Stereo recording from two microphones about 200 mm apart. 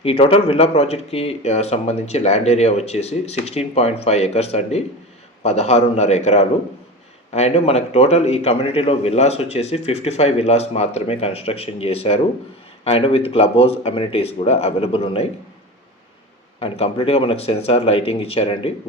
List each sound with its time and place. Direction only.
0.0 s a man's voice: 30° left (ahead or behind)
16.6 s speech: 30° left (ahead or behind)